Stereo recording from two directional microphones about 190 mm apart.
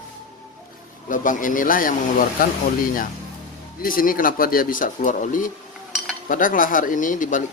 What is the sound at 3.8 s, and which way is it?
Speech, 50° left (ahead or behind).